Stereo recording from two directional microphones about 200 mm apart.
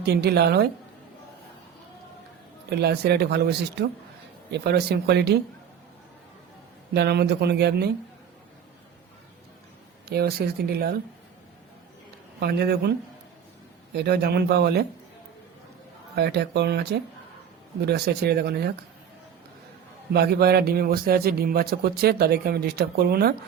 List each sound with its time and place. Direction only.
0.0 s a man's voice: 55° right (ahead or behind)
2.6 s speech: 55° right (ahead or behind)
6.9 s speech: 55° right (ahead or behind)
10.1 s a man's voice: 50° right (ahead or behind)
12.4 s a man's voice: 55° right (ahead or behind)
13.9 s speech: 55° right (ahead or behind)
16.1 s a man's voice: 55° right (ahead or behind)
20.1 s a man's voice: 50° right (ahead or behind)